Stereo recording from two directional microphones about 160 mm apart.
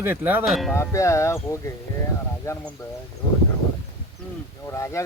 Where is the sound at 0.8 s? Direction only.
20° left (ahead or behind).